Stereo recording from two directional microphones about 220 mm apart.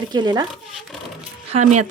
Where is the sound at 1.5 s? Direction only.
30° right (ahead or behind).